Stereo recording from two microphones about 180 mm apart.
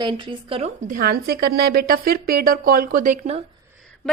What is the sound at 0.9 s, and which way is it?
A woman's voice, 55° right (ahead or behind).